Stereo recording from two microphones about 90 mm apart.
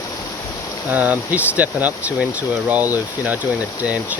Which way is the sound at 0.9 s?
20° right (ahead or behind).